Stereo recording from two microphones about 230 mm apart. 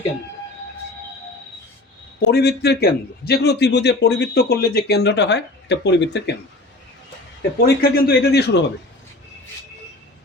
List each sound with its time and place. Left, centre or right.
2.3 s a man's voice: left
7.6 s a man's voice: left